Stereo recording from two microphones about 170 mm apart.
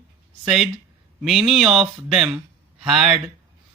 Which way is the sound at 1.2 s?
Centre (ahead or behind).